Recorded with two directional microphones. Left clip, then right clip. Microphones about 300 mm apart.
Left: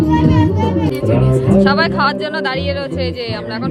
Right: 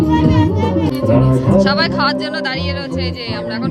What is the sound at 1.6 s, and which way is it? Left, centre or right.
Speech, centre.